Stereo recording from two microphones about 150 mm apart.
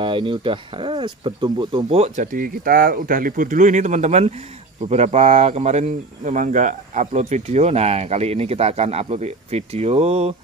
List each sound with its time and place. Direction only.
0.0 s speech: 35° right (ahead or behind)
2.0 s speech: 60° right (ahead or behind); by 10.3 s 45° right (ahead or behind)